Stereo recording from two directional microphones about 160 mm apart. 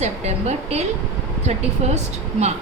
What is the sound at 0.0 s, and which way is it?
Speech, 45° right (ahead or behind).